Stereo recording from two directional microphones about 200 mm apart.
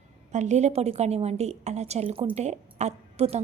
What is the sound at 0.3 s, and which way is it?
A woman's voice, 35° right (ahead or behind).